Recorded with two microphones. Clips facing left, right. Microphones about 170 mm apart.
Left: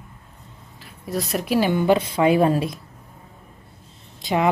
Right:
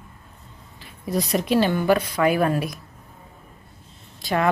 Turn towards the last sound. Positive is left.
turn(degrees=20)  # may be behind; listen again after turning